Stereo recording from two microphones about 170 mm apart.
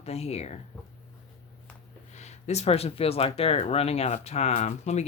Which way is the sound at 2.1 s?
40° left (ahead or behind).